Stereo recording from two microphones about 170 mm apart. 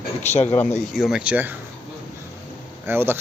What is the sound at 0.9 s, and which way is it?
Speech, 5° right (ahead or behind).